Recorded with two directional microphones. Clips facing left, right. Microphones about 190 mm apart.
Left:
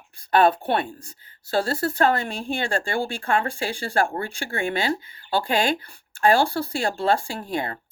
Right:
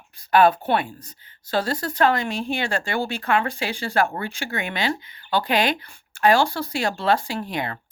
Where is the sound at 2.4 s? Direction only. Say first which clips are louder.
Right 1 dB; 30° left (ahead or behind).